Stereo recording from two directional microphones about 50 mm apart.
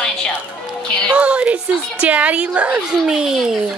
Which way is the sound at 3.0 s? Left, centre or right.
Centre.